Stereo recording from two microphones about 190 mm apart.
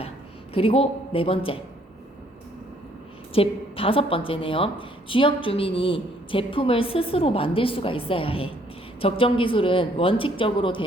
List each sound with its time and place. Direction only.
0.5 s a woman's voice: 30° left (ahead or behind)
3.3 s a woman's voice: 30° left (ahead or behind)